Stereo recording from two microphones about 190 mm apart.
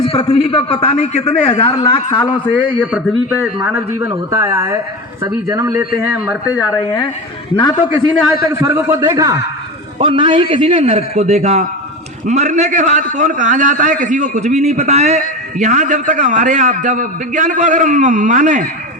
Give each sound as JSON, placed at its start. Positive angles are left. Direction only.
{"t": 0.0, "sound": "a man's voice", "side_deg": 30}
{"t": 2.8, "sound": "a man's voice", "side_deg": -5}
{"t": 4.0, "sound": "a man's voice", "side_deg": -15}
{"t": 7.5, "sound": "a man's voice", "side_deg": 25}
{"t": 8.4, "sound": "a man's voice", "side_deg": -15}